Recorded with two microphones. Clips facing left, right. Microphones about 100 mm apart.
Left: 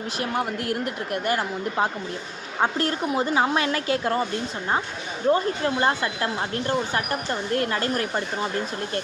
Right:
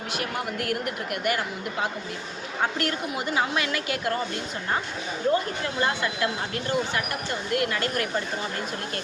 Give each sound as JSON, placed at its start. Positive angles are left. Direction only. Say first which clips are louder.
{"t": 0.2, "sound": "a woman's voice", "louder": "left 4 dB", "side_deg": 30}
{"t": 5.3, "sound": "speech", "louder": "left 6 dB", "side_deg": 35}